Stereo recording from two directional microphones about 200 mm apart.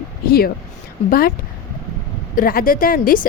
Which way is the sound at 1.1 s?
50° left (ahead or behind).